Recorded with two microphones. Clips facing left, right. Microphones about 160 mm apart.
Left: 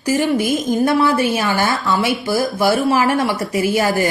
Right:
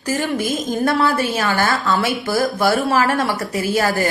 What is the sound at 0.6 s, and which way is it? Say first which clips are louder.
A woman's voice: left 2 dB; 20° left (ahead or behind).